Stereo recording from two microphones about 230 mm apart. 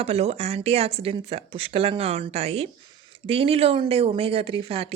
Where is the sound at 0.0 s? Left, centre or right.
Right.